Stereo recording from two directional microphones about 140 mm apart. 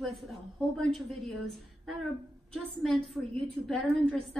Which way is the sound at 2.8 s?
5° left (ahead or behind).